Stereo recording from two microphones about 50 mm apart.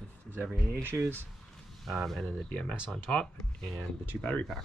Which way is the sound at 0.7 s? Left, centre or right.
Right.